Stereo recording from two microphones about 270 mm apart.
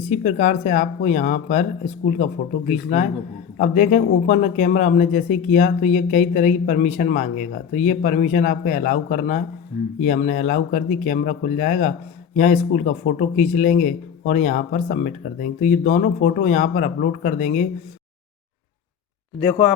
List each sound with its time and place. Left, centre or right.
0.1 s speech: left